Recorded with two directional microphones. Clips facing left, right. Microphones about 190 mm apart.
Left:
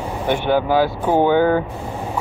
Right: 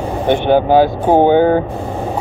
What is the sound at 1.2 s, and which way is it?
Speech, 25° right (ahead or behind).